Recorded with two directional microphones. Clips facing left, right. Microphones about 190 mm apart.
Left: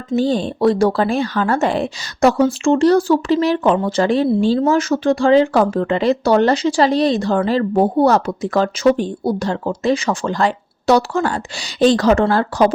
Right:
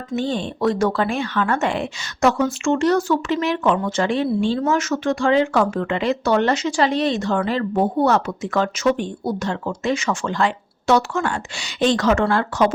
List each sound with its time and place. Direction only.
0.1 s speech: 35° left (ahead or behind)